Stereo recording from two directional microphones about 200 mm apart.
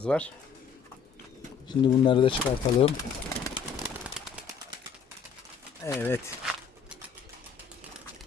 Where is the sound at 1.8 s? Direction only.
25° left (ahead or behind).